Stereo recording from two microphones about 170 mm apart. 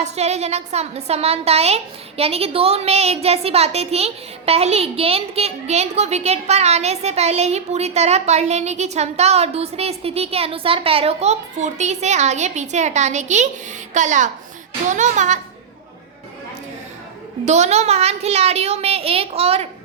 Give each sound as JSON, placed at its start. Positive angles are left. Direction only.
{"t": 0.0, "sound": "a woman's voice", "side_deg": -40}
{"t": 17.4, "sound": "a woman's voice", "side_deg": -40}